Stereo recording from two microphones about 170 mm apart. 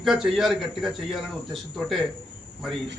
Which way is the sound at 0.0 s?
Centre (ahead or behind).